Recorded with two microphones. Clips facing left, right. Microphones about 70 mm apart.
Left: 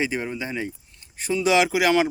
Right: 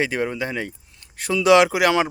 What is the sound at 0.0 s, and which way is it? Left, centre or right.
Speech, right.